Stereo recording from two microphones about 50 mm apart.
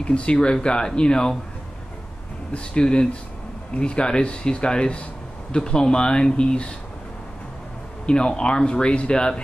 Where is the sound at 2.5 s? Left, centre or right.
Centre.